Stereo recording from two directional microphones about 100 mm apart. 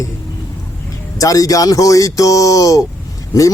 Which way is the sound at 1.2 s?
35° left (ahead or behind).